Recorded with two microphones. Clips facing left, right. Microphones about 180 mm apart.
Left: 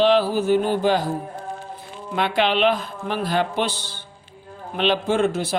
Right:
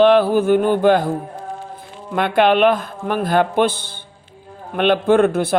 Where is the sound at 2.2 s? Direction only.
50° right (ahead or behind).